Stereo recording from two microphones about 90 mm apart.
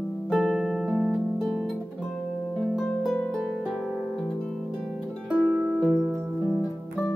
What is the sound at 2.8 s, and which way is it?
Harp, centre (ahead or behind).